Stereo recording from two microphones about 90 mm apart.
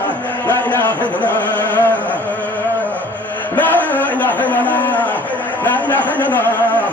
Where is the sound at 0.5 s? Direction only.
20° left (ahead or behind).